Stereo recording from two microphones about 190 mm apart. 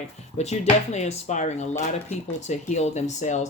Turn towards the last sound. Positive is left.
turn(degrees=40)  # may be behind; listen again after turning